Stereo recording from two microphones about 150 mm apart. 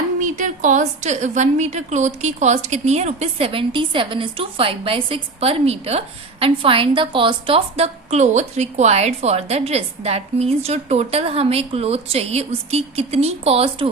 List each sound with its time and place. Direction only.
0.2 s a woman's voice: 60° right (ahead or behind); by 13.9 s 40° right (ahead or behind)